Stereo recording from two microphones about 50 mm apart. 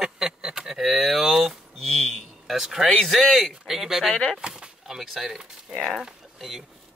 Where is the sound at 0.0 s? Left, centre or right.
Centre.